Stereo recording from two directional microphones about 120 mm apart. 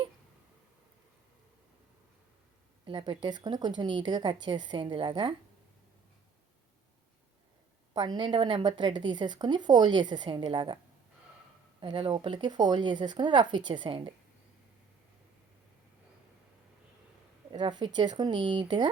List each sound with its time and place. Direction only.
2.8 s a woman's voice: 45° right (ahead or behind)
7.9 s a woman's voice: 40° right (ahead or behind)
11.8 s a woman's voice: 40° right (ahead or behind)
17.5 s a woman's voice: 40° right (ahead or behind)